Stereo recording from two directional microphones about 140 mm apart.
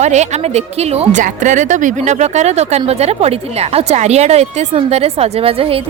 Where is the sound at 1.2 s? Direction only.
65° right (ahead or behind).